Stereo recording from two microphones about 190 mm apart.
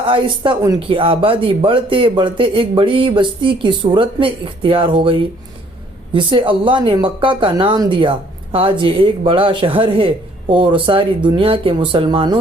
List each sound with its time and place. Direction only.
0.1 s speech: 20° right (ahead or behind)
6.1 s speech: 25° right (ahead or behind)